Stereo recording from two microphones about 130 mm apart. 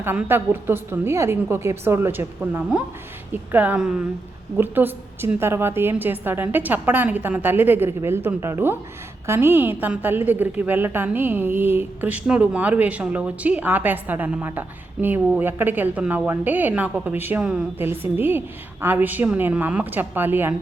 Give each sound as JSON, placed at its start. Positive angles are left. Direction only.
{"t": 0.0, "sound": "a woman's voice", "side_deg": -15}